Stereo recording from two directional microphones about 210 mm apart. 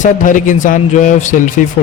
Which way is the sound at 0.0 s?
40° left (ahead or behind).